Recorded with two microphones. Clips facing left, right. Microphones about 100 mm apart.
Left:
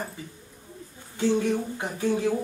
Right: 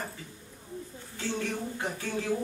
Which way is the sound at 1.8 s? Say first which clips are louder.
Left 8 dB; 15° left (ahead or behind).